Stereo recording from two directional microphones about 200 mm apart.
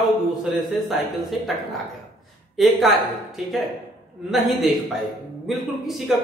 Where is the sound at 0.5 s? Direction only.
Centre (ahead or behind).